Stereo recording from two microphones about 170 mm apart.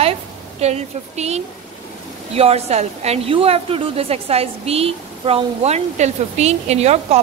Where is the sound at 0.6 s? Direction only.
40° right (ahead or behind).